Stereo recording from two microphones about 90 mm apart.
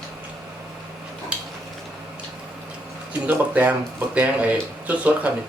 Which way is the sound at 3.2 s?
15° right (ahead or behind).